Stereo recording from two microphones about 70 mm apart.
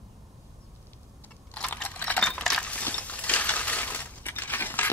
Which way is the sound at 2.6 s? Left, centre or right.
Left.